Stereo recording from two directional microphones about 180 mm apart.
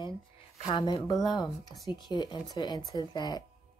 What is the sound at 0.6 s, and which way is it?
Speech, 30° left (ahead or behind).